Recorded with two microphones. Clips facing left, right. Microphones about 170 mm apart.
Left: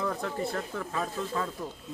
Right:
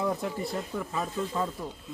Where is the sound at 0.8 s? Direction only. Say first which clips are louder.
Right 1 dB; 10° right (ahead or behind).